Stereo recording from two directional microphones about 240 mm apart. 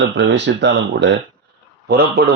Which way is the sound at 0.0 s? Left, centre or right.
Right.